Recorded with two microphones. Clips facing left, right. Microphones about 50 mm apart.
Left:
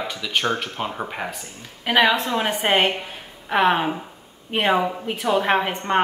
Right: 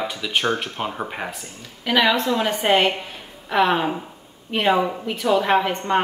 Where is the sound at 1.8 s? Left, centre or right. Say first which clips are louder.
Even; left.